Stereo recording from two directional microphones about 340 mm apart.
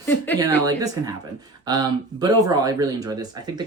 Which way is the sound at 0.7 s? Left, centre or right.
Centre.